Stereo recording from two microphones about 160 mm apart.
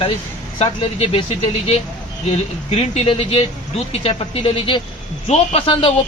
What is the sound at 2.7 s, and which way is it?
Speech, 40° left (ahead or behind).